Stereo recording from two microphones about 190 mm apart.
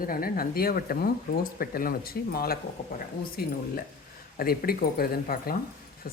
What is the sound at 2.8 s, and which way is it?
Speech, 40° left (ahead or behind).